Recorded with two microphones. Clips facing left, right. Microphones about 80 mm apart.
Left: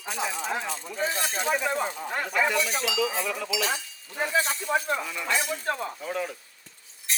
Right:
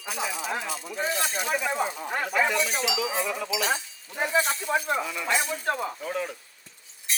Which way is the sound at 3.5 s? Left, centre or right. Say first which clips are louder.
Right 1 dB; right.